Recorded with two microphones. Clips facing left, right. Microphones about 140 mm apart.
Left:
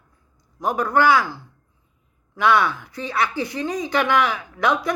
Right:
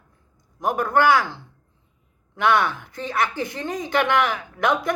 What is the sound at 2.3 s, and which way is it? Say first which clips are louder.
Speech: left 1 dB; 50° right (ahead or behind).